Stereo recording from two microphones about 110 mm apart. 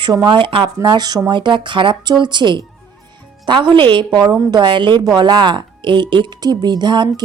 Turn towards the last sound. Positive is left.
turn(degrees=-40)  # may be behind; listen again after turning